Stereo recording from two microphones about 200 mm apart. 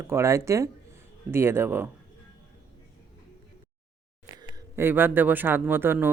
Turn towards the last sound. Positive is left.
turn(degrees=-10)  # may be behind; listen again after turning